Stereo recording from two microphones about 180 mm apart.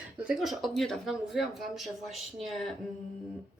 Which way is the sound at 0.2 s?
5° right (ahead or behind).